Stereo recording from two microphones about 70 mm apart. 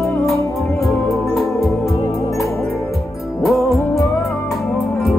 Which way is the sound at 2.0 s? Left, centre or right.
Left.